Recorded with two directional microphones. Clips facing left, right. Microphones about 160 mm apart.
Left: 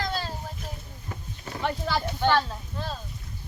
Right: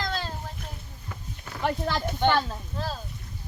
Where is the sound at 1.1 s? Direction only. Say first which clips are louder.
Left 3 dB; 30° left (ahead or behind).